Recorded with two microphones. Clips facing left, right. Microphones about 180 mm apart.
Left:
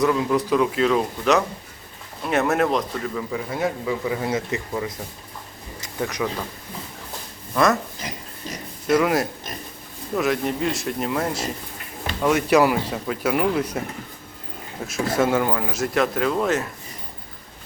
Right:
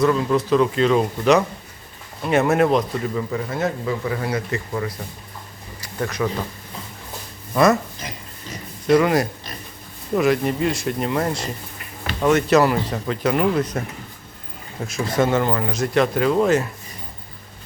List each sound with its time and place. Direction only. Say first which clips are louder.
0.0 s speech: right 2 dB; 10° left (ahead or behind)
3.5 s speech: left 1 dB; 10° left (ahead or behind)
6.0 s speech: right 1 dB; 15° left (ahead or behind)
7.5 s speech: right 3 dB; centre (ahead or behind)
8.9 s speech: right 3 dB; centre (ahead or behind)
14.8 s speech: right 1 dB; 5° left (ahead or behind)